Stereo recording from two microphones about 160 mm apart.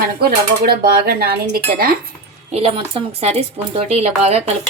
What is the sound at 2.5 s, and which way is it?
Speech, 35° right (ahead or behind).